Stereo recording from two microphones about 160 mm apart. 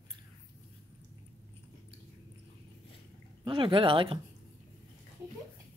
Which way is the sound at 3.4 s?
30° right (ahead or behind).